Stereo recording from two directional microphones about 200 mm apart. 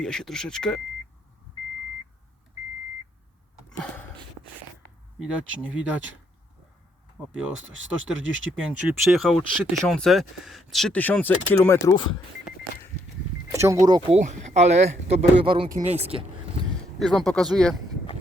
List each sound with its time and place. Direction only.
0.0 s speech: 5° left (ahead or behind)
5.2 s speech: 5° right (ahead or behind)
7.7 s speech: 70° right (ahead or behind)
8.5 s speech: 5° right (ahead or behind); by 11.8 s 10° left (ahead or behind)
11.9 s speech: 20° left (ahead or behind)
13.5 s speech: 15° right (ahead or behind)
14.1 s speech: 35° right (ahead or behind)
17.0 s speech: centre (ahead or behind)